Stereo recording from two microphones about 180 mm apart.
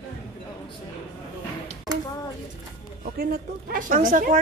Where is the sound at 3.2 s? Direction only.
50° right (ahead or behind).